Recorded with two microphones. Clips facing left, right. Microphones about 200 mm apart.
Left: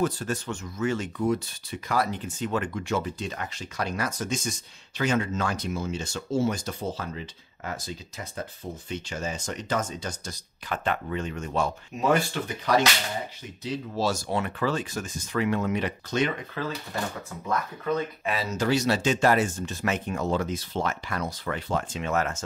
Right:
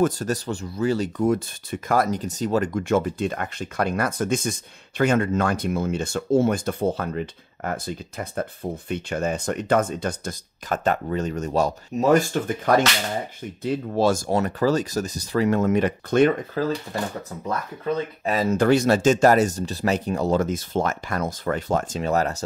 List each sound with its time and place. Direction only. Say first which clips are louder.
0.0 s speech: right 5 dB; 40° right (ahead or behind)
16.6 s speech: right 6 dB; 40° right (ahead or behind)